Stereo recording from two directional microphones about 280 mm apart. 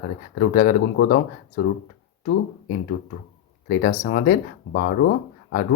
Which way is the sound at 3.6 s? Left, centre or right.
Left.